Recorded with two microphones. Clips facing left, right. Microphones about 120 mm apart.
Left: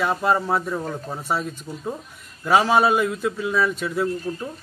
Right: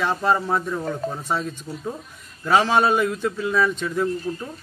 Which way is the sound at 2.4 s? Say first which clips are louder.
Left 1 dB; 5° left (ahead or behind).